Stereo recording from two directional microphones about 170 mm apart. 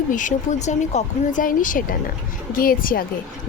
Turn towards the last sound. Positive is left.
turn(degrees=60)  # may be behind; listen again after turning